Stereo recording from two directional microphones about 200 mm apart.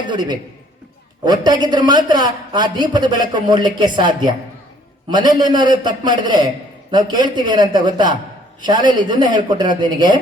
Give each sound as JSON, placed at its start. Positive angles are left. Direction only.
{"t": 0.1, "sound": "a man's voice", "side_deg": -20}